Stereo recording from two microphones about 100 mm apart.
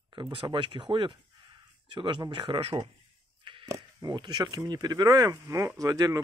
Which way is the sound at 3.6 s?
35° right (ahead or behind).